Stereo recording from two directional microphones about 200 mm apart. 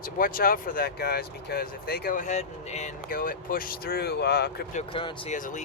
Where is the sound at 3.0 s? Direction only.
45° left (ahead or behind).